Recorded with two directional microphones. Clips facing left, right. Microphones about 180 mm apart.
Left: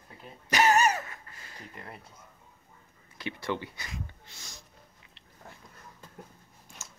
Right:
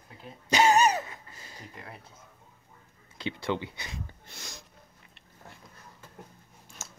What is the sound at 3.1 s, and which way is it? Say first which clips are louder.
Speech: right 2 dB; 20° right (ahead or behind).